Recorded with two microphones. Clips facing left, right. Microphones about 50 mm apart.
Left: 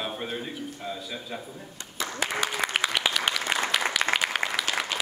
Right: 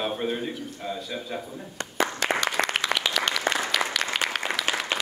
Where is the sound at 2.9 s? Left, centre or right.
Centre.